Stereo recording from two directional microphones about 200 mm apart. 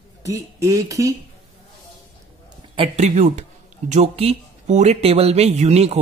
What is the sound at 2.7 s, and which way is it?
Speech, 30° right (ahead or behind).